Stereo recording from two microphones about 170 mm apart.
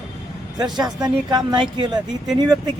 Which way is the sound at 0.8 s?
25° right (ahead or behind).